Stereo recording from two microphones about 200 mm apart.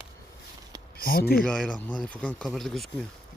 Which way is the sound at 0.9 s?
45° left (ahead or behind).